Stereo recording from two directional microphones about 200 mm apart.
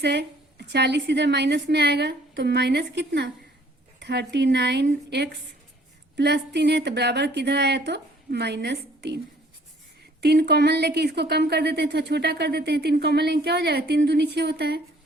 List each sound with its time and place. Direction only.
0.0 s speech: 60° right (ahead or behind)